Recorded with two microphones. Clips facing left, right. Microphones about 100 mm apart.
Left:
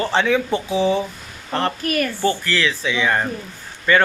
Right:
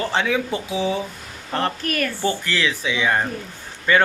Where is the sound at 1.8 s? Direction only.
15° left (ahead or behind).